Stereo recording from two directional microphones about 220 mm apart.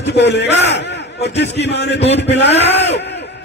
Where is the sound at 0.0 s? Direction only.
50° left (ahead or behind).